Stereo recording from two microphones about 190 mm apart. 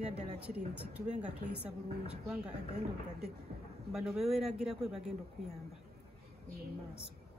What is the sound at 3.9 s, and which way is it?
Speech, centre (ahead or behind).